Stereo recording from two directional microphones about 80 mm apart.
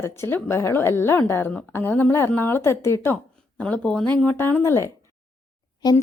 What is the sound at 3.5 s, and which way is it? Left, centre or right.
Speech, centre.